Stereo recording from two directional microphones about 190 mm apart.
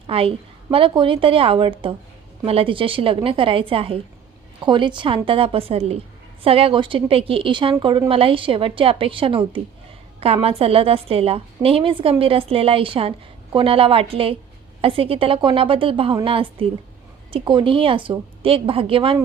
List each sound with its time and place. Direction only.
0.1 s a woman's voice: 30° right (ahead or behind)